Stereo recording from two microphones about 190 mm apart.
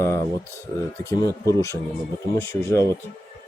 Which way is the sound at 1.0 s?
15° left (ahead or behind).